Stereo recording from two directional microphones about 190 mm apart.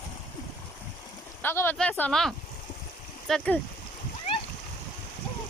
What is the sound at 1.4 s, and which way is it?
Speech, 10° left (ahead or behind).